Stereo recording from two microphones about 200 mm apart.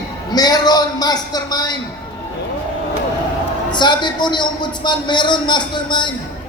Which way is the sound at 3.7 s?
20° left (ahead or behind).